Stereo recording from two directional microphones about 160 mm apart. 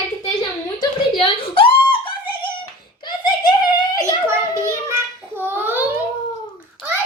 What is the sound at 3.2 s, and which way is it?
Giggle, 30° left (ahead or behind).